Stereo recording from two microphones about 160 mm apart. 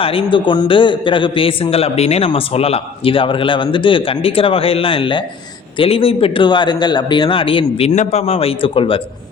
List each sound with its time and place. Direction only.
0.0 s a man's voice: 35° left (ahead or behind)